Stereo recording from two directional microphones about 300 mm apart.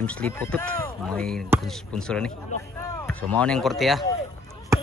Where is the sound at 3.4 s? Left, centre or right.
Centre.